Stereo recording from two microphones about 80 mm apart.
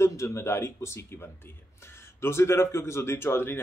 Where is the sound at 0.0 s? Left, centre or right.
Left.